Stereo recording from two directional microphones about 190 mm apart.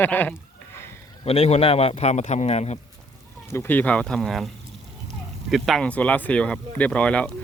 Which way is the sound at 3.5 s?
10° left (ahead or behind).